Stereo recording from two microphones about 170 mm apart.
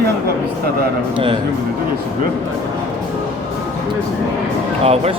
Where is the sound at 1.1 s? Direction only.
30° right (ahead or behind).